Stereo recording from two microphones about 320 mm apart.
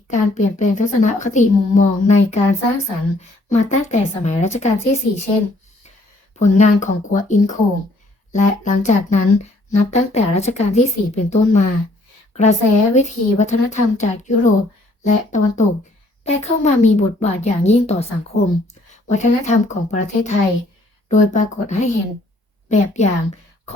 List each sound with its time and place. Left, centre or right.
0.1 s a woman's voice: left
6.4 s a woman's voice: left